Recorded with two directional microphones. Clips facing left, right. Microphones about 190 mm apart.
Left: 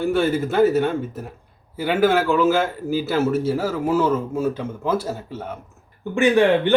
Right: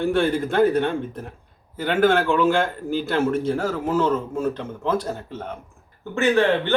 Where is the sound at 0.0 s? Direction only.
5° left (ahead or behind).